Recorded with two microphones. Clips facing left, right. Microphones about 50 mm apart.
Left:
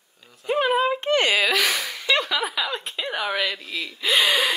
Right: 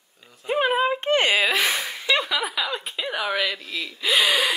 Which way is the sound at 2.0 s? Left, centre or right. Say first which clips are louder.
Left 1 dB; centre.